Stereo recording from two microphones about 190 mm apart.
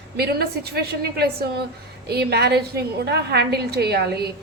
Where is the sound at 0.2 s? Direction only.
55° right (ahead or behind).